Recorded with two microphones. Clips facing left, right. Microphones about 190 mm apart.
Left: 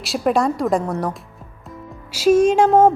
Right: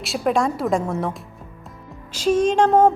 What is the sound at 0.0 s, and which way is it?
A woman's voice, centre (ahead or behind).